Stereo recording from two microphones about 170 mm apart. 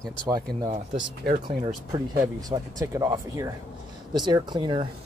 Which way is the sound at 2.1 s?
20° right (ahead or behind).